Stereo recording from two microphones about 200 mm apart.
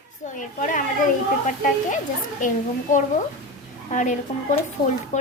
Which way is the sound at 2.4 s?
40° left (ahead or behind).